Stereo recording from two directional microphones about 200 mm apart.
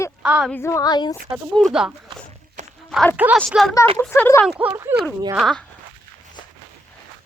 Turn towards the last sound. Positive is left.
turn(degrees=0)  # may be behind; listen again after turning